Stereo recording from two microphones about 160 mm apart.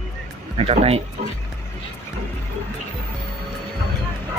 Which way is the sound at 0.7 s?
40° right (ahead or behind).